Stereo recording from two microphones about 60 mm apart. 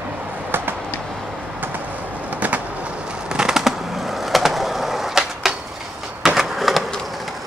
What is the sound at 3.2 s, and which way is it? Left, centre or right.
Skateboard, centre.